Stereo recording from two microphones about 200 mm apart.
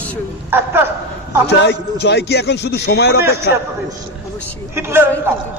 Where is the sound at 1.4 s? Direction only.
60° left (ahead or behind).